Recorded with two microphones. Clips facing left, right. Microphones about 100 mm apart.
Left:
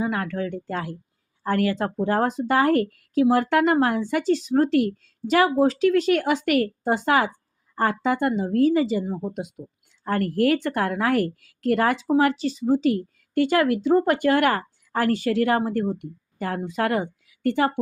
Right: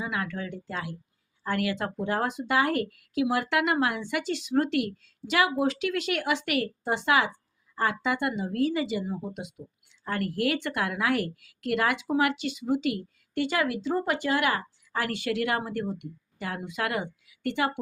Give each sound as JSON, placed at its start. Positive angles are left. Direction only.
{"t": 0.0, "sound": "speech", "side_deg": 40}